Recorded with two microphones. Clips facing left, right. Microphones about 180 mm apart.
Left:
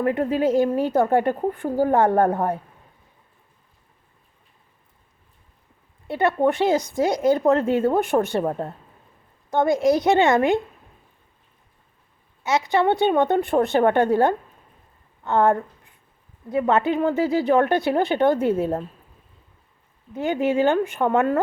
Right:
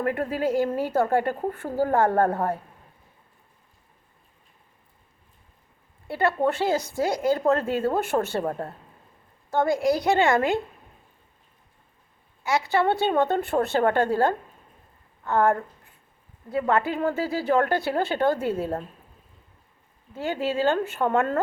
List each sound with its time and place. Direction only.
0.0 s speech: 20° left (ahead or behind)
6.1 s speech: 20° left (ahead or behind)
12.4 s a woman's voice: 20° left (ahead or behind)
20.1 s a woman's voice: 20° left (ahead or behind)